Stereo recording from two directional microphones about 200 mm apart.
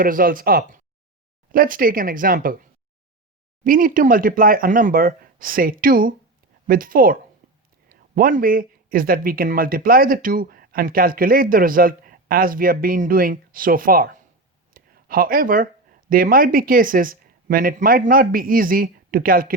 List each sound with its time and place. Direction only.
0.0 s speech: 45° right (ahead or behind)
3.6 s speech: 45° right (ahead or behind)